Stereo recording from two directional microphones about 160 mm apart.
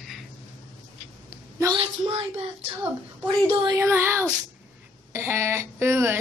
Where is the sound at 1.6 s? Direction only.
30° right (ahead or behind).